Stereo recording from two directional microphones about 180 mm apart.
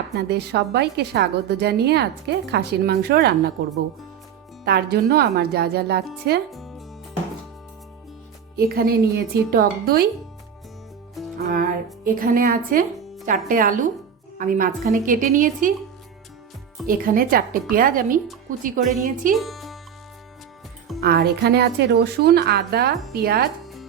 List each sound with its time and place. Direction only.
0.2 s a woman's voice: 70° right (ahead or behind)
4.6 s a woman's voice: 65° right (ahead or behind)
6.5 s music: centre (ahead or behind)
8.5 s a woman's voice: 55° right (ahead or behind)
12.0 s a woman's voice: 50° right (ahead or behind)
16.8 s a woman's voice: 55° right (ahead or behind)
19.4 s music: centre (ahead or behind)
21.0 s a woman's voice: 60° right (ahead or behind)